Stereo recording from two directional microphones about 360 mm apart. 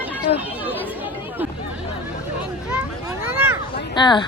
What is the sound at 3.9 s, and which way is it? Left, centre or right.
Speech, centre.